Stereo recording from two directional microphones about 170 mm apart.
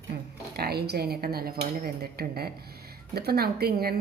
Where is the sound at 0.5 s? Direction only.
70° right (ahead or behind).